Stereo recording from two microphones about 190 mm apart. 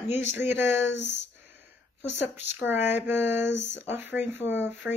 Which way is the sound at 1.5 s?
10° right (ahead or behind).